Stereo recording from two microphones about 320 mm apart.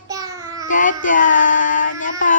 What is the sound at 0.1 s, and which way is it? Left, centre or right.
Child singing, centre.